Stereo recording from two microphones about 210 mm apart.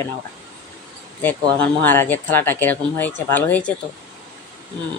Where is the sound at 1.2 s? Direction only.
10° left (ahead or behind).